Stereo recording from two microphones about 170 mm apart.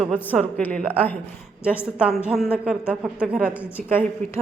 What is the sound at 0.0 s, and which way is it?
A woman's voice, 5° left (ahead or behind).